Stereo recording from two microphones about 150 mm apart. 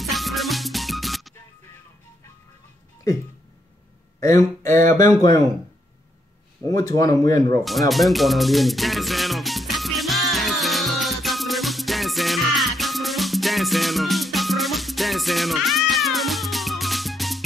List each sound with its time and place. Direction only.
0.0 s music: centre (ahead or behind)
4.2 s speech: 20° left (ahead or behind)
6.6 s speech: 25° left (ahead or behind)
7.9 s music: centre (ahead or behind)